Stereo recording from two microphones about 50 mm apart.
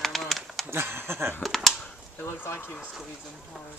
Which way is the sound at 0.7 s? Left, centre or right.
Right.